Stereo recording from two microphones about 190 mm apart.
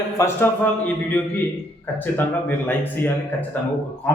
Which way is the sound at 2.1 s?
10° left (ahead or behind).